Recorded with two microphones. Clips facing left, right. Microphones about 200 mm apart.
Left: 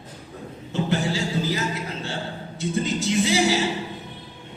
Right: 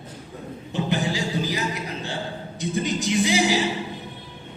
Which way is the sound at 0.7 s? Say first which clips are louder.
Left 1 dB; 20° right (ahead or behind).